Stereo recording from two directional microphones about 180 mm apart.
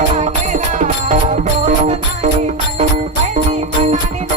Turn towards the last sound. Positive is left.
turn(degrees=-40)  # may be behind; listen again after turning